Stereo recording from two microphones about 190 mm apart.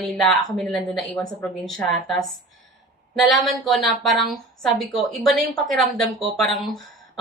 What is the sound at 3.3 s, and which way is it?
Speech, centre (ahead or behind).